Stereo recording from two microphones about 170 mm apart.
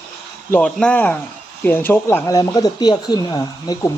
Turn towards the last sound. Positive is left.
turn(degrees=20)  # may be behind; listen again after turning